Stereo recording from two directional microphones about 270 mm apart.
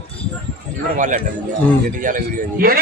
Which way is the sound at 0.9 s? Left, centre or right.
Right.